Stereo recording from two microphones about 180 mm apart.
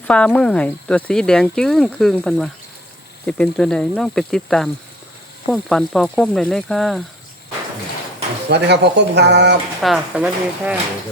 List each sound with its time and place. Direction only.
0.0 s speech: 5° left (ahead or behind)
8.4 s speech: 70° right (ahead or behind)
9.8 s speech: 5° right (ahead or behind)